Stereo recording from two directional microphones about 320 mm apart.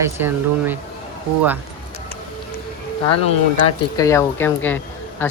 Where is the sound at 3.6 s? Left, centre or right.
Centre.